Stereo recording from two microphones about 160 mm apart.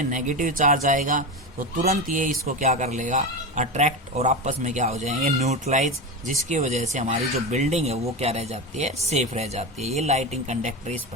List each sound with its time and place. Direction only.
0.0 s speech: 50° right (ahead or behind)